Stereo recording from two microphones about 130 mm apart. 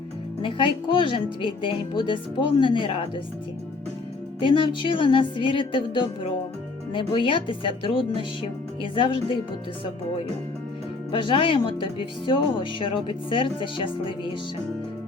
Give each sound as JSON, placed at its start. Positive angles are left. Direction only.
{"t": 0.4, "sound": "speech", "side_deg": 40}
{"t": 4.4, "sound": "speech", "side_deg": 40}
{"t": 11.1, "sound": "speech", "side_deg": 40}